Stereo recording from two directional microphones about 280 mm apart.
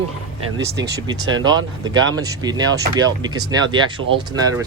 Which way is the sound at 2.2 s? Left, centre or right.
Centre.